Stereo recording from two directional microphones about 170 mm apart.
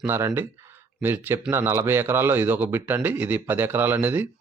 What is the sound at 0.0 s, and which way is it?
Speech, 15° right (ahead or behind).